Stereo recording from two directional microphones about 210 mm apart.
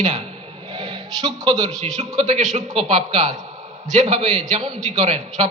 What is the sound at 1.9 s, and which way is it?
A man's voice, 35° right (ahead or behind).